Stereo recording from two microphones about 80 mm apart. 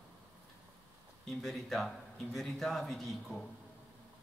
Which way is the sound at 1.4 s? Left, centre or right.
Centre.